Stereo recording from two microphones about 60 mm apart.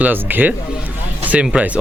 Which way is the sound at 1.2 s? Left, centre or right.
Right.